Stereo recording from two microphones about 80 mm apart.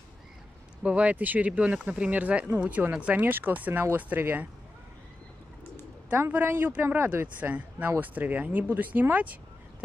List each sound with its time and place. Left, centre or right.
0.8 s speech: centre
6.0 s speech: right